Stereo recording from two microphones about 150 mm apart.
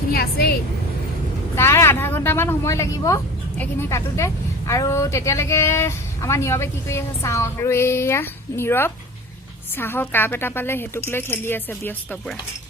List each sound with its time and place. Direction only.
0.1 s a woman's voice: 90° left
1.5 s a woman's voice: 15° left (ahead or behind)